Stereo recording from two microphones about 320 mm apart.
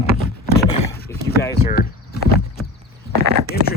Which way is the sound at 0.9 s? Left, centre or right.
Left.